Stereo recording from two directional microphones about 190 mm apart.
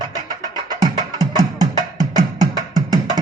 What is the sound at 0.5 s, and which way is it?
Music, 20° right (ahead or behind).